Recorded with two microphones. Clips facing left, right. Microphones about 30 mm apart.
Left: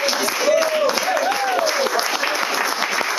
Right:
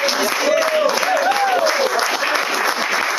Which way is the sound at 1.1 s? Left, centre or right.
Centre.